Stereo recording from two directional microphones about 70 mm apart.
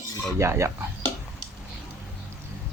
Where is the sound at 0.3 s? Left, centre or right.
Right.